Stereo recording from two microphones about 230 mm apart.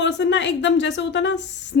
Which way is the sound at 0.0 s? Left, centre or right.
Left.